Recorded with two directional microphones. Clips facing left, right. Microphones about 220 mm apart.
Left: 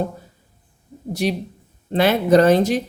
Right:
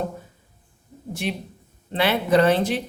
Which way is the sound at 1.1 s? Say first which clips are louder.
Left 6 dB; 40° left (ahead or behind).